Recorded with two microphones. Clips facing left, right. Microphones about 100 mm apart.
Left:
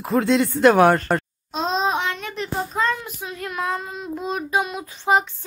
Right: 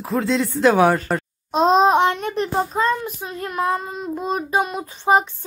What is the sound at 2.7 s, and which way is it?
Child singing, 35° right (ahead or behind).